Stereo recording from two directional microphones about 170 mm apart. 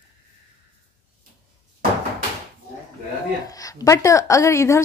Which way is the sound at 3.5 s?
20° left (ahead or behind).